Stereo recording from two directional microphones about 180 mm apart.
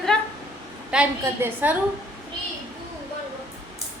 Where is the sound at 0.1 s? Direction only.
5° left (ahead or behind).